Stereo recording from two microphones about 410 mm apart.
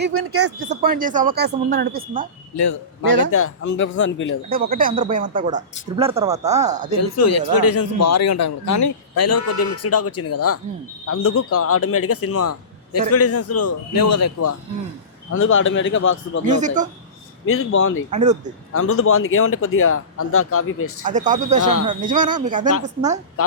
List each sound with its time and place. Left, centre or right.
0.0 s speech: right
0.7 s speech: right
3.3 s a man's voice: left
4.4 s speech: right
7.0 s a man's voice: left
16.5 s speech: centre
17.4 s a man's voice: left
18.1 s speech: centre
18.7 s speech: left
21.0 s speech: centre